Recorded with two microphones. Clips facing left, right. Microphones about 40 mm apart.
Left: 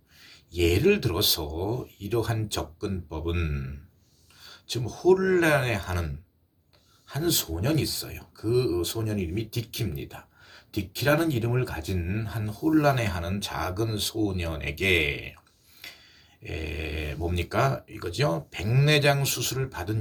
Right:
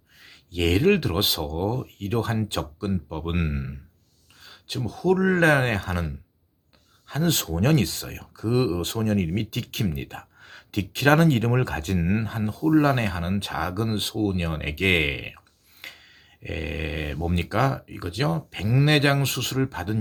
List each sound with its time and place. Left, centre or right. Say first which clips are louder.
0.2 s speech: left 1 dB; right
7.1 s speech: right 3 dB; right
12.3 s speech: right 3 dB; right
12.7 s speech: right 2 dB; centre
15.8 s a sound: right 4 dB; right
16.4 s speech: right 4 dB; right